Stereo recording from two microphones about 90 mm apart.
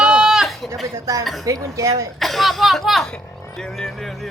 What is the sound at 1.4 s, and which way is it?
Speech, 40° right (ahead or behind).